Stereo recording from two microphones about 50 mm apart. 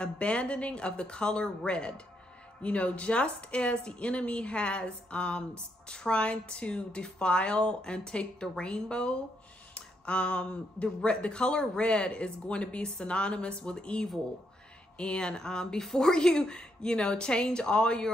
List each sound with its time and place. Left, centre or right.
0.0 s speech: left